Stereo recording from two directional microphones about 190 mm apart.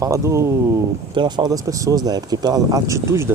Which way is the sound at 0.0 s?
15° right (ahead or behind).